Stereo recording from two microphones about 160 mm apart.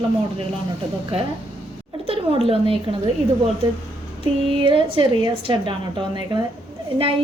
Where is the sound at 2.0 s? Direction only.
35° right (ahead or behind).